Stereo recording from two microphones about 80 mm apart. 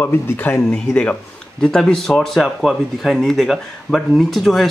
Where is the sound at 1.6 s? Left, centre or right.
Centre.